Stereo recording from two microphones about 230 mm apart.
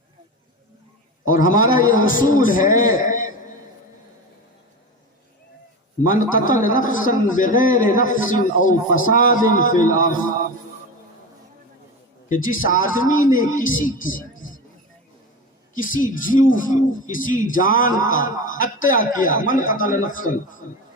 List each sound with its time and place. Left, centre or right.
1.3 s a man's voice: left
6.1 s a man's voice: left
12.3 s a man's voice: left
15.7 s a man's voice: left